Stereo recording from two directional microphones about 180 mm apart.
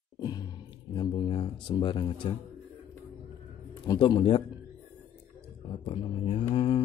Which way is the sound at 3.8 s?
25° left (ahead or behind).